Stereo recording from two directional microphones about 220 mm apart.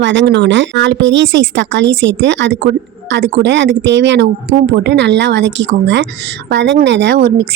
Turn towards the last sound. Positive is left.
turn(degrees=-50)  # may be behind; listen again after turning